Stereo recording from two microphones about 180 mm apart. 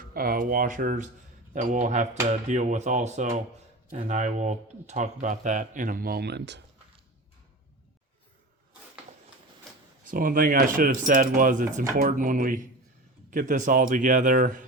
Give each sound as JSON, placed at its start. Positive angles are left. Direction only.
{"t": 0.0, "sound": "speech", "side_deg": -55}
{"t": 10.0, "sound": "speech", "side_deg": -50}